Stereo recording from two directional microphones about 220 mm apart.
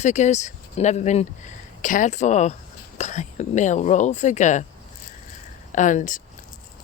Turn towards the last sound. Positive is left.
turn(degrees=35)  # may be behind; listen again after turning